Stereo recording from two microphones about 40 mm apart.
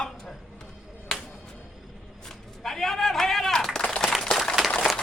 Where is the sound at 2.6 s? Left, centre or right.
Centre.